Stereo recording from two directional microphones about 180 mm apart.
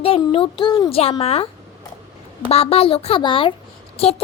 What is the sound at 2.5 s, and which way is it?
Speech, 35° left (ahead or behind).